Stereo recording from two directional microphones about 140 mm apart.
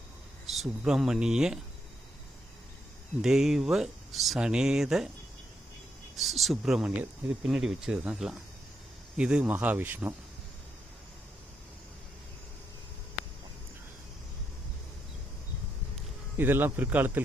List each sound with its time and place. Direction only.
0.5 s speech: centre (ahead or behind)
3.2 s speech: 5° right (ahead or behind)
6.1 s speech: centre (ahead or behind)
16.4 s speech: 15° right (ahead or behind)